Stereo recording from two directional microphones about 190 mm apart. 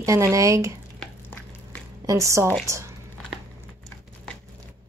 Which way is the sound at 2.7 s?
15° right (ahead or behind).